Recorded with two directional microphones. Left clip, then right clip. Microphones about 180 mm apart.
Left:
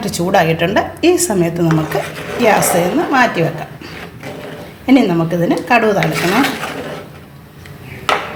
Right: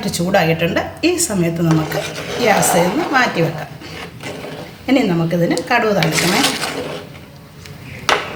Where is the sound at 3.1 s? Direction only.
35° left (ahead or behind).